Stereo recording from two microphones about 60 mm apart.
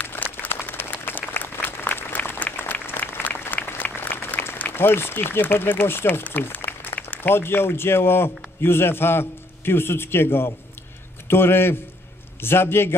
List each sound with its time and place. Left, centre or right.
0.0 s applause: left
0.5 s applause: left
7.1 s a man's voice: left